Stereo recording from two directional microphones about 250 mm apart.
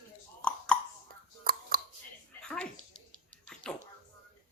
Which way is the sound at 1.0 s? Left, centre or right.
Right.